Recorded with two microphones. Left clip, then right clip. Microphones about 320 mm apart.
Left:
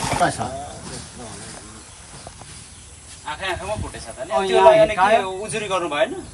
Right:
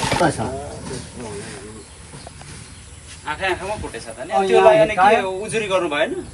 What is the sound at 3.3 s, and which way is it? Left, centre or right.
Speech, left.